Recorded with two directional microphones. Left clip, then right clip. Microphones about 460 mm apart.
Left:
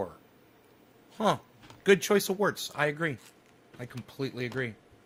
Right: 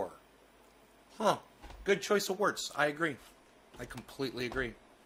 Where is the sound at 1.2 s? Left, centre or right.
Centre.